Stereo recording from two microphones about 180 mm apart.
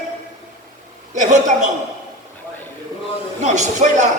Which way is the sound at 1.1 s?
40° right (ahead or behind).